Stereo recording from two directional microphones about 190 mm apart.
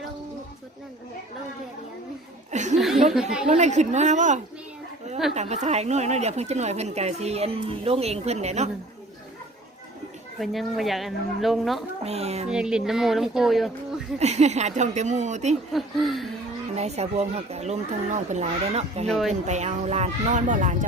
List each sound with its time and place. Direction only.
2.5 s chuckle: 40° right (ahead or behind)
2.7 s chuckle: centre (ahead or behind)
3.1 s speech: 5° right (ahead or behind)
3.4 s speech: 35° right (ahead or behind)
10.3 s speech: centre (ahead or behind)
12.0 s speech: 35° right (ahead or behind)
12.5 s speech: 5° right (ahead or behind)
14.2 s speech: 35° right (ahead or behind)
15.7 s speech: centre (ahead or behind)
16.7 s speech: 35° right (ahead or behind)